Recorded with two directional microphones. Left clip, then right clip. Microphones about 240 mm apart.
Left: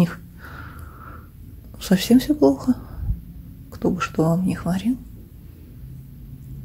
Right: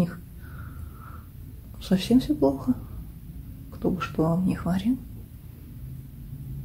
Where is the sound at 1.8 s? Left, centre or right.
Left.